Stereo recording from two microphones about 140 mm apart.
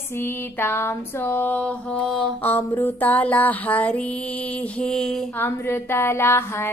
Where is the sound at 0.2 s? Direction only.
15° left (ahead or behind).